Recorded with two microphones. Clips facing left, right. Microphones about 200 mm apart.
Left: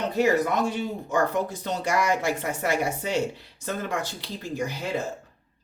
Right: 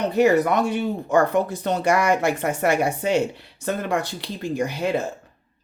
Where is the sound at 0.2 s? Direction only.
65° right (ahead or behind).